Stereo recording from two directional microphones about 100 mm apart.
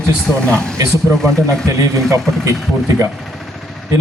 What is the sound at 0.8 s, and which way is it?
A man's voice, 30° right (ahead or behind).